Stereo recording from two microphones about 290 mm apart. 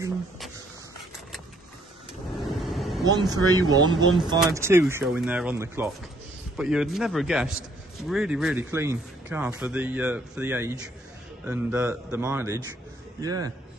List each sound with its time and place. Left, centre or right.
2.4 s vehicle: centre
3.1 s speech: centre